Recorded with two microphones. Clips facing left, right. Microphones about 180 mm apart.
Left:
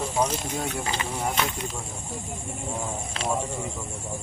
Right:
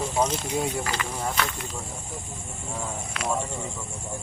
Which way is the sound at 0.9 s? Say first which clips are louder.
Left 1 dB; 20° left (ahead or behind).